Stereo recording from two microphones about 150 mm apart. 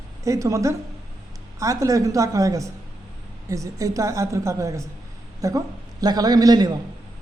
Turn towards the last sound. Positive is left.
turn(degrees=-25)  # may be behind; listen again after turning